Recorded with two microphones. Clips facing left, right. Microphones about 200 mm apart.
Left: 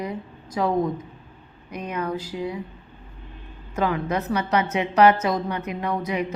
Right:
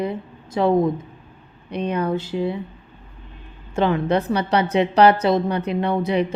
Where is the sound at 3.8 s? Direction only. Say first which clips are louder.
Right 5 dB; 25° right (ahead or behind).